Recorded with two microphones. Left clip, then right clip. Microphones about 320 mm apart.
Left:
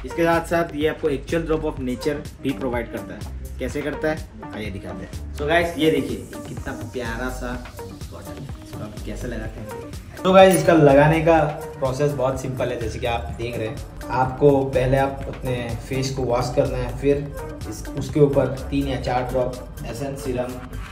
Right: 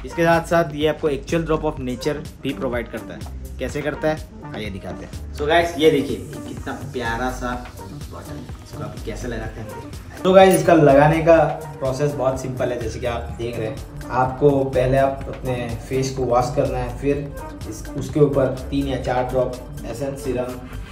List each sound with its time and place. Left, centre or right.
0.1 s speech: centre
10.2 s speech: centre